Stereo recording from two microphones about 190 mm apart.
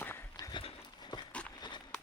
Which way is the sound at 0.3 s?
25° left (ahead or behind).